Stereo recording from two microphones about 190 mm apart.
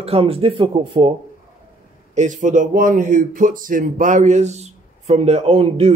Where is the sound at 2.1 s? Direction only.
40° right (ahead or behind).